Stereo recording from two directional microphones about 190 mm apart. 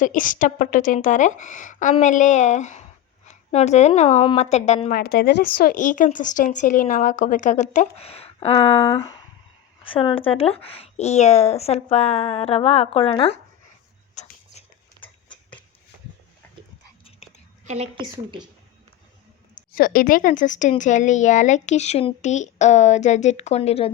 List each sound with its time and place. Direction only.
0.0 s a woman's voice: 45° left (ahead or behind)
14.2 s a sound: 35° left (ahead or behind)
17.7 s a woman's voice: 35° right (ahead or behind)
18.0 s a woman's voice: 25° right (ahead or behind)
19.7 s a woman's voice: 50° left (ahead or behind); by 23.9 s 30° left (ahead or behind)